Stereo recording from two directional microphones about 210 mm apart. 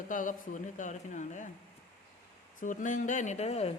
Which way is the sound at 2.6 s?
35° left (ahead or behind).